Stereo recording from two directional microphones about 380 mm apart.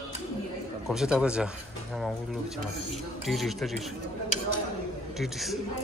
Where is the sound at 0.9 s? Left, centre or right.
Centre.